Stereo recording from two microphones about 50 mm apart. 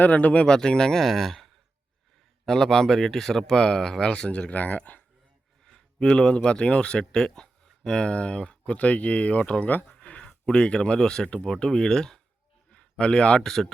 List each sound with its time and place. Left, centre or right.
0.0 s speech: left
0.4 s speech: centre; by 5.0 s left
5.6 s a sound: centre
6.1 s speech: centre
12.7 s a sound: left
13.4 s speech: centre